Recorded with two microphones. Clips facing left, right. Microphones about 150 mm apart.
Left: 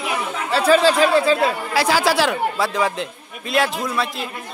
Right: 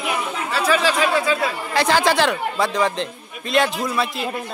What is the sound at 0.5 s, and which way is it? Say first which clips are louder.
Speech: left 5 dB; 30° left (ahead or behind).